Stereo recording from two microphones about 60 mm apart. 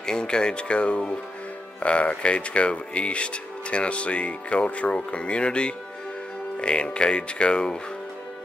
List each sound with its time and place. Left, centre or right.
0.0 s speech: centre